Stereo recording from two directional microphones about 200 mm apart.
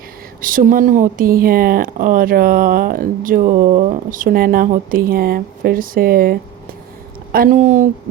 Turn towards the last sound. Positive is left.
turn(degrees=-40)  # may be behind; listen again after turning